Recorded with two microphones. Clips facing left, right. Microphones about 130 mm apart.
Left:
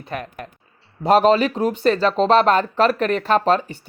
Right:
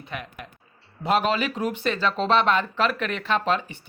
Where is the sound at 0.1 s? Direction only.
40° left (ahead or behind).